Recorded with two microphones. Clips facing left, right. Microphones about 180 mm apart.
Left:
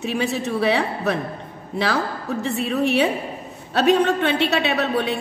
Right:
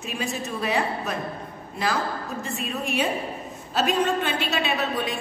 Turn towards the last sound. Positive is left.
turn(degrees=65)  # may be behind; listen again after turning